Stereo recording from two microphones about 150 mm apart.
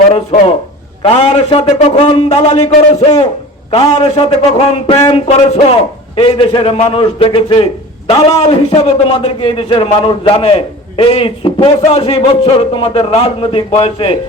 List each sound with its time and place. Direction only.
0.1 s a man's voice: 45° left (ahead or behind)